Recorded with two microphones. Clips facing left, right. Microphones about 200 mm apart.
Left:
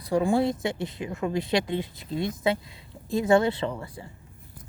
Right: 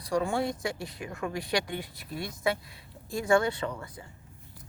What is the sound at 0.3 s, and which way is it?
Speech, 25° left (ahead or behind).